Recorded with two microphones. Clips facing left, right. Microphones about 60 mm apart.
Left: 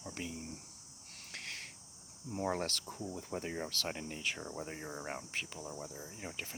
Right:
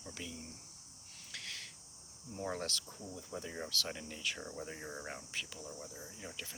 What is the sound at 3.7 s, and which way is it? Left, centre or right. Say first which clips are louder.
Speech: left 2 dB; left.